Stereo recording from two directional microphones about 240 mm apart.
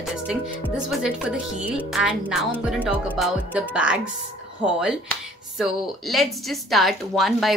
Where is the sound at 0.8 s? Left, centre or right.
Centre.